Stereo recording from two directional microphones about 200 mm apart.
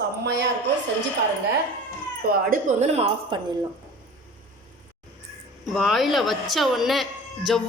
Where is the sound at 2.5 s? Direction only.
35° right (ahead or behind).